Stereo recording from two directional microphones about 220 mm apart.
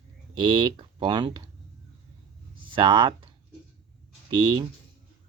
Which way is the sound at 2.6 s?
20° right (ahead or behind).